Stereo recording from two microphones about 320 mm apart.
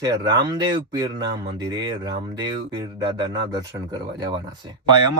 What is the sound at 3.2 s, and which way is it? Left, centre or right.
Speech, centre.